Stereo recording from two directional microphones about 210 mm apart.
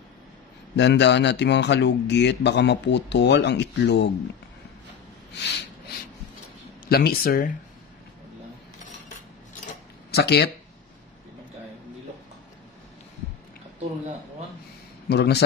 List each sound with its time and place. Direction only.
0.7 s speech: 55° left (ahead or behind)
5.3 s snort: 55° left (ahead or behind)
6.9 s speech: 45° left (ahead or behind)
10.1 s speech: 50° left (ahead or behind)
15.0 s speech: 50° left (ahead or behind)